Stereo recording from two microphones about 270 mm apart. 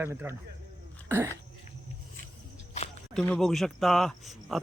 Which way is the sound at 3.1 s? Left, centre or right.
Centre.